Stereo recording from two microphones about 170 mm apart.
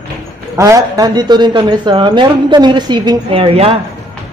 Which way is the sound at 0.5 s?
20° right (ahead or behind).